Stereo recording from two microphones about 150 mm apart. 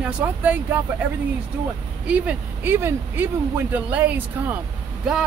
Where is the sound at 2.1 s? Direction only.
10° right (ahead or behind).